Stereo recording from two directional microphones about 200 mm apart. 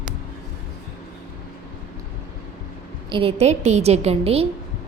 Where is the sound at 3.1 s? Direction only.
30° right (ahead or behind).